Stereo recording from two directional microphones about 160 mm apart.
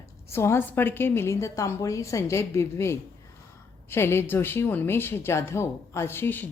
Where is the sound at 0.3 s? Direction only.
15° left (ahead or behind).